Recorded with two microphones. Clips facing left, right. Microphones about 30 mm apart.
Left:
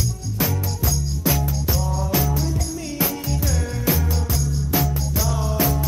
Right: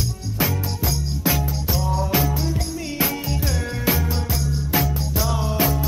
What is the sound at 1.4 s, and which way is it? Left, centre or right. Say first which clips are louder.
Music: even; right.